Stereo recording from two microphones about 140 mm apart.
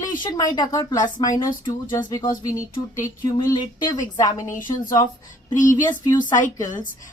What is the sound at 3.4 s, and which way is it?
Speech, 30° left (ahead or behind).